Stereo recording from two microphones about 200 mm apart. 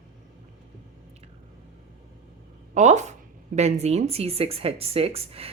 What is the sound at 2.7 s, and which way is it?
Speech, 35° right (ahead or behind).